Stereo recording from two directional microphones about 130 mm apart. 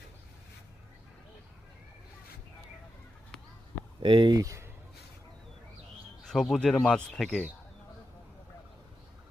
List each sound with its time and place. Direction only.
4.0 s speech: 40° right (ahead or behind)
4.4 s speech: 25° right (ahead or behind)
6.2 s speech: 5° left (ahead or behind)